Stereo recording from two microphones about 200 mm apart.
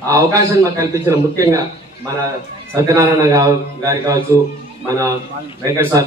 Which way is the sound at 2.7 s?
15° right (ahead or behind).